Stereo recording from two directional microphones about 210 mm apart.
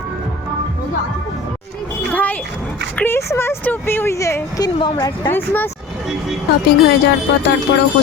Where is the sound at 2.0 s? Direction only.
5° left (ahead or behind).